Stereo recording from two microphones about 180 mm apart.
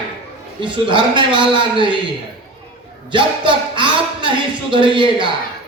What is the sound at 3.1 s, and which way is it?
A man's voice, 25° right (ahead or behind).